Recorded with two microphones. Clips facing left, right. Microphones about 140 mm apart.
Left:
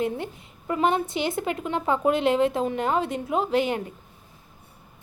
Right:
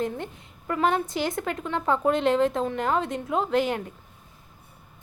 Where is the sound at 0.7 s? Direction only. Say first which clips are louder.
Left 1 dB; 15° left (ahead or behind).